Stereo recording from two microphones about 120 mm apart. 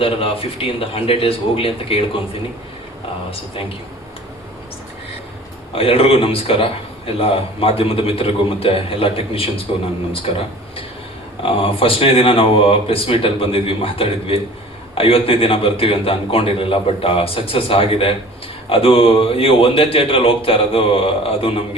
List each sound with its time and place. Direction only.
0.0 s a man's voice: 50° left (ahead or behind)
5.7 s a man's voice: 50° left (ahead or behind)